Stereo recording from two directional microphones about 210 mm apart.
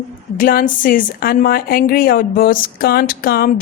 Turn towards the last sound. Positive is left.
turn(degrees=45)  # may be behind; listen again after turning